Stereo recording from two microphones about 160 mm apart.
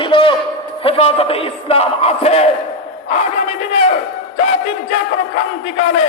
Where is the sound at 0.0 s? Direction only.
30° left (ahead or behind).